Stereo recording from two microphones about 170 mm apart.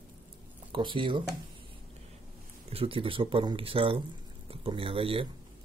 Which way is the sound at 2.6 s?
35° right (ahead or behind).